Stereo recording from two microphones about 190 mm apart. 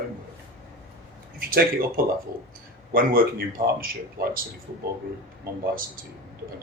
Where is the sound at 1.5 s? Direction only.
50° right (ahead or behind).